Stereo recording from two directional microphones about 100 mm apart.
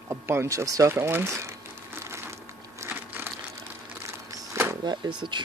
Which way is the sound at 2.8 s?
25° right (ahead or behind).